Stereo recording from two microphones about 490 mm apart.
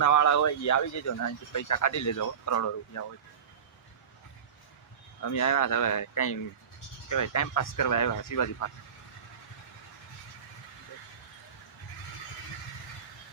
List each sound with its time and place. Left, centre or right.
0.0 s speech: left
5.2 s speech: left